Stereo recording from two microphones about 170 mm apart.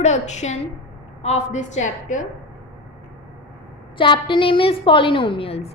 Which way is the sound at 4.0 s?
30° left (ahead or behind).